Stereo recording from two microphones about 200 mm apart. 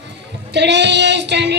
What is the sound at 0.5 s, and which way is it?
Child singing, 60° right (ahead or behind).